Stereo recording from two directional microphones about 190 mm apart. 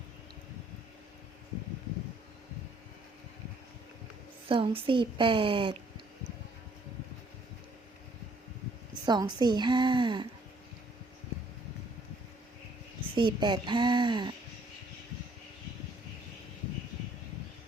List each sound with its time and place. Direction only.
4.4 s speech: 30° right (ahead or behind)
9.0 s speech: 20° right (ahead or behind)
13.1 s speech: 25° right (ahead or behind)